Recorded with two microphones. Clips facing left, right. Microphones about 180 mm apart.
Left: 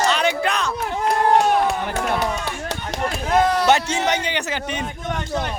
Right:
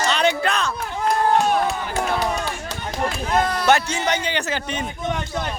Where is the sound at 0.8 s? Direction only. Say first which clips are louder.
Left 1 dB; 70° left (ahead or behind).